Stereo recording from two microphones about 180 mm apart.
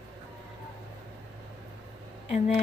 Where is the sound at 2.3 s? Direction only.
35° left (ahead or behind).